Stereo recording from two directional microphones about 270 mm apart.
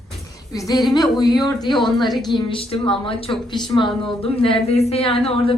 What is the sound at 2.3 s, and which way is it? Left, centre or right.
Speech, centre.